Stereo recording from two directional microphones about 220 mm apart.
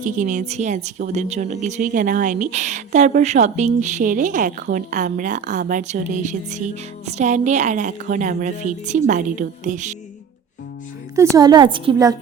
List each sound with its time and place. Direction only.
0.0 s a woman's voice: 35° right (ahead or behind)
11.3 s a woman's voice: 20° right (ahead or behind)